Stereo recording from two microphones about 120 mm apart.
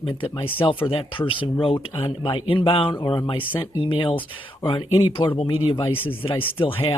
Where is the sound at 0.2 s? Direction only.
45° left (ahead or behind).